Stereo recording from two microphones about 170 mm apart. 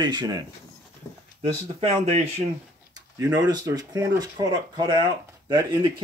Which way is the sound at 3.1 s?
20° right (ahead or behind).